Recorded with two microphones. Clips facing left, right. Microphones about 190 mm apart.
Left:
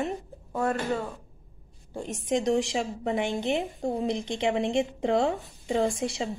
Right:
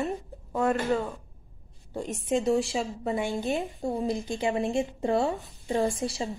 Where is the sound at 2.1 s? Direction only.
15° left (ahead or behind).